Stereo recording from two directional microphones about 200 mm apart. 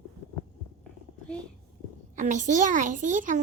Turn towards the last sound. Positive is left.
turn(degrees=-40)  # may be behind; listen again after turning